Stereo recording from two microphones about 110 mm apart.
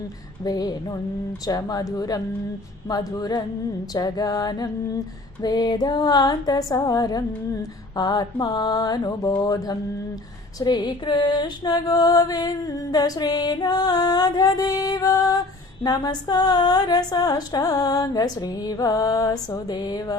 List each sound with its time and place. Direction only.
0.4 s music: 35° left (ahead or behind)